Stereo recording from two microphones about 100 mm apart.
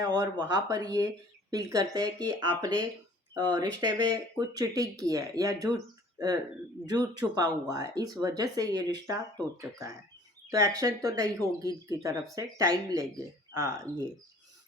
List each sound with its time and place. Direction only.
0.0 s speech: 40° right (ahead or behind)